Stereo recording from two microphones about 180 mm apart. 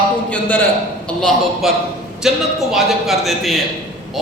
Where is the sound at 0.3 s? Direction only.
10° left (ahead or behind).